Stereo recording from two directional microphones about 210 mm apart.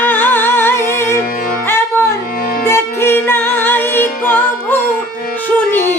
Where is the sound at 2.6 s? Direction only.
10° left (ahead or behind).